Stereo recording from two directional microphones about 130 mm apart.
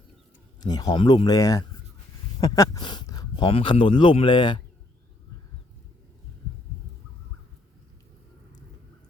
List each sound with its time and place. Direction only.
0.6 s speech: 30° left (ahead or behind)